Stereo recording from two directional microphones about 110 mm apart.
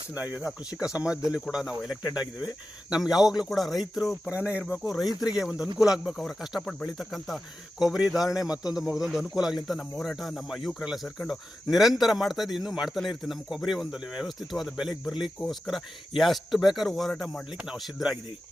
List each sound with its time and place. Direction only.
0.1 s speech: 15° right (ahead or behind)
2.0 s speech: 40° left (ahead or behind)
2.9 s speech: 5° right (ahead or behind)
4.3 s speech: 15° right (ahead or behind)